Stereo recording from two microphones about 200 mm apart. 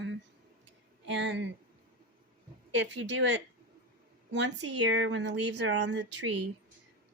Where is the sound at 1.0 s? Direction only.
65° right (ahead or behind).